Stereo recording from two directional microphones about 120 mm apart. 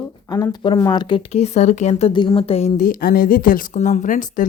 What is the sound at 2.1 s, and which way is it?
Speech, 45° left (ahead or behind).